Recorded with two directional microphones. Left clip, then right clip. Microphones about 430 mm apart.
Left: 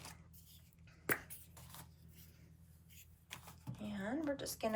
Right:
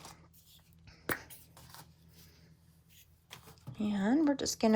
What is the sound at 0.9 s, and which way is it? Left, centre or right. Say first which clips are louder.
Finger snapping: right 2 dB; centre.